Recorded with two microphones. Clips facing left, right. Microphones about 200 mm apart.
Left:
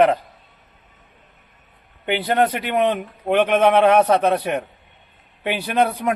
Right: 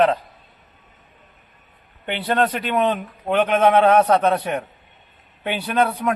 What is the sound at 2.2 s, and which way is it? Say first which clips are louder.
A man's voice: even; 10° left (ahead or behind).